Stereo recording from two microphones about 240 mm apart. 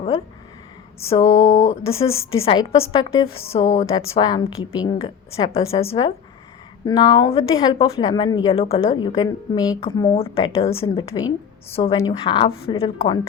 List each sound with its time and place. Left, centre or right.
1.1 s a woman's voice: centre